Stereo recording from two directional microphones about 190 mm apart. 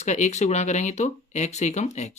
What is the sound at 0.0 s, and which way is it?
Speech, 40° left (ahead or behind).